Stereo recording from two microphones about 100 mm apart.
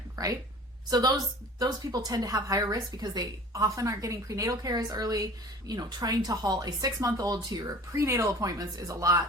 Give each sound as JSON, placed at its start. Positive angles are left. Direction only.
{"t": 0.2, "sound": "a woman's voice", "side_deg": -40}
{"t": 7.9, "sound": "a woman's voice", "side_deg": -30}